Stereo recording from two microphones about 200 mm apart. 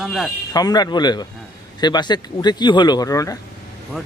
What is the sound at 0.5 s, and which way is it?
Speech, 20° left (ahead or behind).